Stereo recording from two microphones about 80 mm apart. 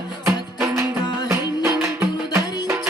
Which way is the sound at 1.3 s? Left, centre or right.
Right.